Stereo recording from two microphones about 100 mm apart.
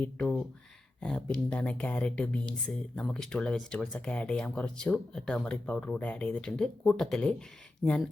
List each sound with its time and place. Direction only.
0.0 s speech: 10° left (ahead or behind)